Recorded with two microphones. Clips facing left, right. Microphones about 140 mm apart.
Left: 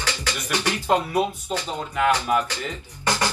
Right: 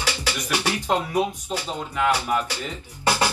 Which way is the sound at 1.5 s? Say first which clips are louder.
Left 1 dB; 10° right (ahead or behind).